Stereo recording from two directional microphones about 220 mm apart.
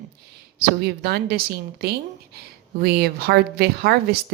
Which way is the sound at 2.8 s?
45° right (ahead or behind).